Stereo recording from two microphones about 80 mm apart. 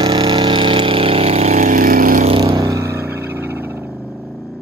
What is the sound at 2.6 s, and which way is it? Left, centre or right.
Vehicle, right.